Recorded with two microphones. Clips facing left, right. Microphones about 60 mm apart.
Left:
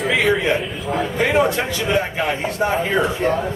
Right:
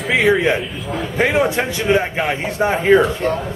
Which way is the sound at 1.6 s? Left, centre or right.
Right.